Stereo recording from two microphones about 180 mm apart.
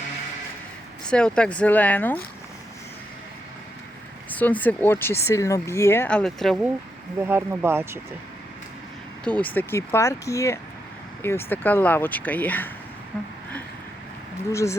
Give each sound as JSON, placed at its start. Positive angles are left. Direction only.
{"t": 1.0, "sound": "speech", "side_deg": 5}
{"t": 4.3, "sound": "speech", "side_deg": 10}
{"t": 7.2, "sound": "speech", "side_deg": -15}
{"t": 9.2, "sound": "speech", "side_deg": 10}
{"t": 14.5, "sound": "speech", "side_deg": 15}